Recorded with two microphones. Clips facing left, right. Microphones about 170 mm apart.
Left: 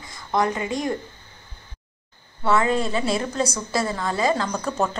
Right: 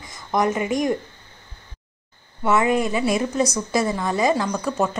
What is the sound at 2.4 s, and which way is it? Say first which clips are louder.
A woman's voice: right 2 dB; 15° right (ahead or behind).